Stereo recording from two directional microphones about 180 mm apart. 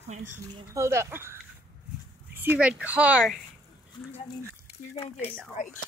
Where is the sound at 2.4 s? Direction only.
10° right (ahead or behind).